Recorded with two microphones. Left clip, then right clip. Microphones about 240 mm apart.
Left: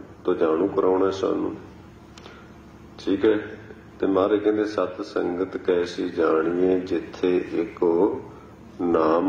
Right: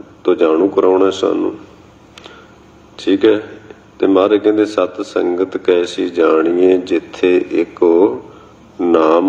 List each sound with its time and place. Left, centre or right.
0.2 s speech: right
3.1 s a man's voice: right